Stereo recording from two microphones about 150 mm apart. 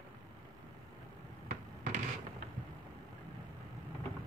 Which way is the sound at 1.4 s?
55° right (ahead or behind).